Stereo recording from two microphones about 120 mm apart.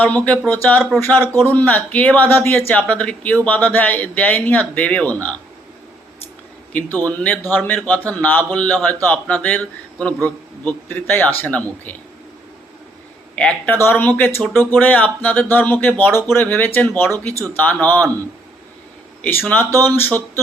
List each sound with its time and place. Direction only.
0.0 s a man's voice: 10° left (ahead or behind)
6.7 s a man's voice: 15° left (ahead or behind)
13.3 s a man's voice: 15° left (ahead or behind)
19.2 s a man's voice: 15° left (ahead or behind)